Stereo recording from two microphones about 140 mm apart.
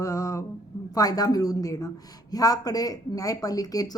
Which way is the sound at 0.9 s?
25° left (ahead or behind).